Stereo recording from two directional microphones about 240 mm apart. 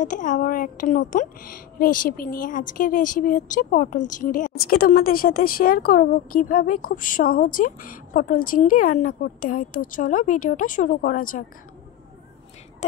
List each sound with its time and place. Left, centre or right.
0.0 s a woman's voice: left